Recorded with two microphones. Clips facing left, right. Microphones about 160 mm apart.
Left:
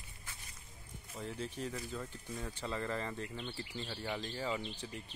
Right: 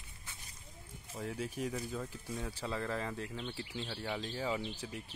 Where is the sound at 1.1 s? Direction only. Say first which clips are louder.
Right 2 dB; 10° right (ahead or behind).